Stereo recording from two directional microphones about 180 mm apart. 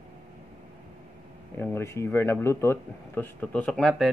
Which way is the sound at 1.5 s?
10° left (ahead or behind).